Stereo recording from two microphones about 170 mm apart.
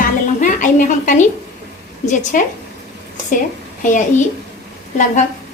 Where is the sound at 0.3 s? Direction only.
50° left (ahead or behind).